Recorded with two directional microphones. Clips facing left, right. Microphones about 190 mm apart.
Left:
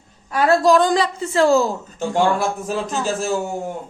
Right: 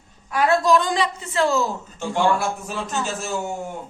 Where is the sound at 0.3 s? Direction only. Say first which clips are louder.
Left 3 dB; 30° left (ahead or behind).